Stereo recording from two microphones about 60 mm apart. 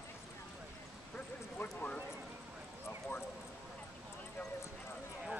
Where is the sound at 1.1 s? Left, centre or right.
Left.